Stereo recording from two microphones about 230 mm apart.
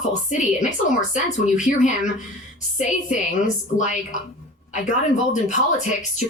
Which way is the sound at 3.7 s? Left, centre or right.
Left.